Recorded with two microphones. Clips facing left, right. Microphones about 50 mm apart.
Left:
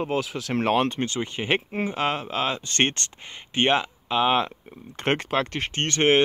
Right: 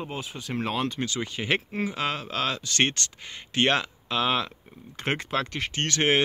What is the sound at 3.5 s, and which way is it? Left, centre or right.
Speech, left.